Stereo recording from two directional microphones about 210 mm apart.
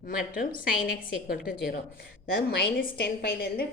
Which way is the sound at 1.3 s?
45° left (ahead or behind).